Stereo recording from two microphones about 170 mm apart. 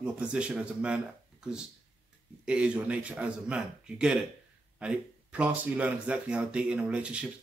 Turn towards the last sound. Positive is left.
turn(degrees=-5)  # may be behind; listen again after turning